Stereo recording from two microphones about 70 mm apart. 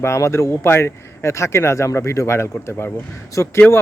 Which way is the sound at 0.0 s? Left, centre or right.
Left.